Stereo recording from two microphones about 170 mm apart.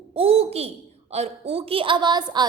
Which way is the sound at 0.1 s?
35° right (ahead or behind).